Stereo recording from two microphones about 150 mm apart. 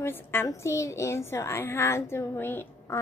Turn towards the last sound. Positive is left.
turn(degrees=15)  # may be behind; listen again after turning